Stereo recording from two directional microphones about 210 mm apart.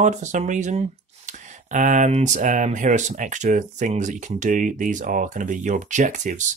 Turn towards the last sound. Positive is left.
turn(degrees=-35)  # may be behind; listen again after turning